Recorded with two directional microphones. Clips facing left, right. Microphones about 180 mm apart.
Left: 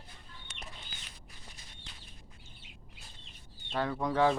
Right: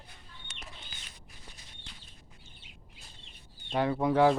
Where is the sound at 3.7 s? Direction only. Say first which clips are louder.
Right 5 dB; 15° right (ahead or behind).